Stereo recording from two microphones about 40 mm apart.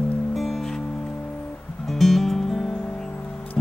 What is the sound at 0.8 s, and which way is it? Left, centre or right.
Music, centre.